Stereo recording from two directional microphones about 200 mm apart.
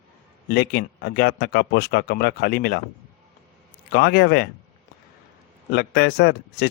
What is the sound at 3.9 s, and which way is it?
Speech, 50° left (ahead or behind).